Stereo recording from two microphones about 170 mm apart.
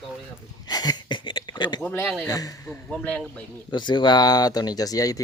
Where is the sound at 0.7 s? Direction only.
25° left (ahead or behind).